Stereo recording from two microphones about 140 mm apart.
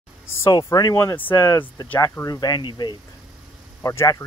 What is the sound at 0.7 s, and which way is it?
Speech, 25° left (ahead or behind).